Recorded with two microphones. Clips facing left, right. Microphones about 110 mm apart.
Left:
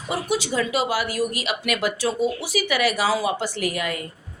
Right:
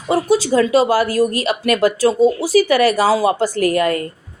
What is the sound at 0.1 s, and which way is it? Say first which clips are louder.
A woman's voice: right 10 dB; 40° right (ahead or behind).